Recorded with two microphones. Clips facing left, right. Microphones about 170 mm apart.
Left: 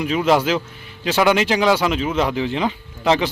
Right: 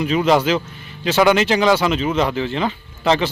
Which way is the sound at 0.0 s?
5° left (ahead or behind).